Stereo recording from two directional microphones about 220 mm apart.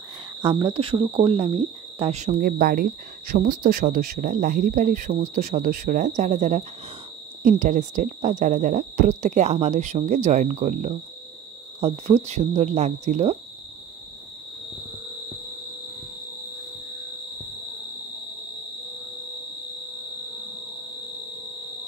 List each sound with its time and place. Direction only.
0.4 s speech: 20° right (ahead or behind)